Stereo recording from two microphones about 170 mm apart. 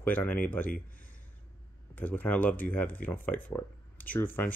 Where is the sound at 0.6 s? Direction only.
55° left (ahead or behind).